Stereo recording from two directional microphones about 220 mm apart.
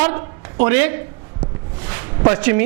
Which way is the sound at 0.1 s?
25° right (ahead or behind).